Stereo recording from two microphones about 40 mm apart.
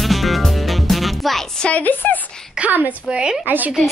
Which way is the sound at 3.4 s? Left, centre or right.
Right.